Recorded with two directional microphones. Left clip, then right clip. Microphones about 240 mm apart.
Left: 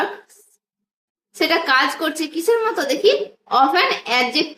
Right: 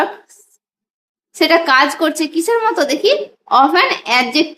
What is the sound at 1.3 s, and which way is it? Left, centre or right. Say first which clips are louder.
A woman's voice: right 5 dB; right.